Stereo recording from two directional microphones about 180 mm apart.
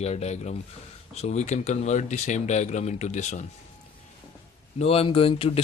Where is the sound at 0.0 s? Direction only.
35° left (ahead or behind).